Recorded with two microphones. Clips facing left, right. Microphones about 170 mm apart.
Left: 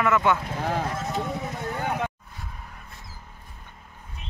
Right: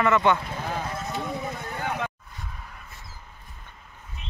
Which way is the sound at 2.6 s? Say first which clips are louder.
Even; 35° left (ahead or behind).